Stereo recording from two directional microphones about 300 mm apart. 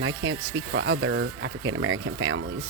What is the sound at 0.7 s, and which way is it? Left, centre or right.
Speech, right.